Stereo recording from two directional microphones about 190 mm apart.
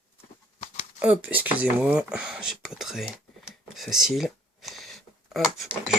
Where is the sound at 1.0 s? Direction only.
10° right (ahead or behind).